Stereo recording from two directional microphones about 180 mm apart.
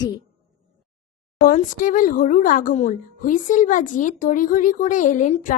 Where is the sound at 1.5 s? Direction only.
45° left (ahead or behind).